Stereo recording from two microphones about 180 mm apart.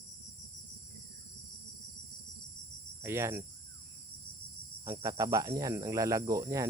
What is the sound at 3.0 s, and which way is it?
Speech, 15° right (ahead or behind).